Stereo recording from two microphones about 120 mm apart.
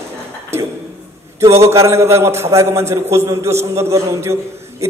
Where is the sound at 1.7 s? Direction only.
25° right (ahead or behind).